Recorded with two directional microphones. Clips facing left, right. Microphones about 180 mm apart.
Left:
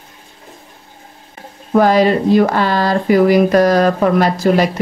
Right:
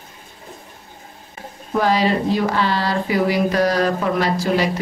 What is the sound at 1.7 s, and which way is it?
Speech, 50° left (ahead or behind).